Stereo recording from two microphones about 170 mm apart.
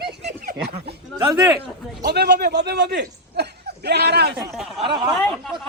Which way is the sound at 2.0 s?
75° right (ahead or behind).